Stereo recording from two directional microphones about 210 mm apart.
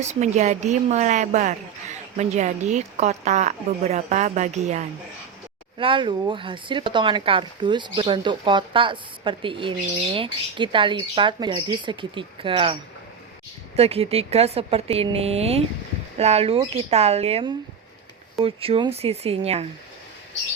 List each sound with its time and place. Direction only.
0.0 s a woman's voice: 35° right (ahead or behind)
5.8 s speech: 25° right (ahead or behind)
13.7 s speech: 30° right (ahead or behind)